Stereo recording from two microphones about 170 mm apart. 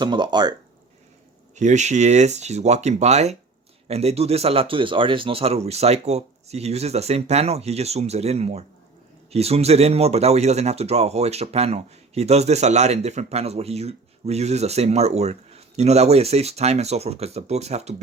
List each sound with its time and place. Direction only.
0.0 s speech: 25° right (ahead or behind)
1.5 s speech: 45° right (ahead or behind)